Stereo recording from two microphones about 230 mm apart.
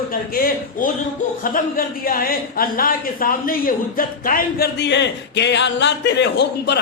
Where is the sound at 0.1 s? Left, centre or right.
Left.